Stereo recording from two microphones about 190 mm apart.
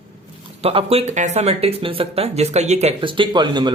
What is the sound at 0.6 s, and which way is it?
Speech, 30° right (ahead or behind).